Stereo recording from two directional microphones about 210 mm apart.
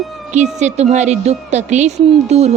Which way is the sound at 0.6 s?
35° right (ahead or behind).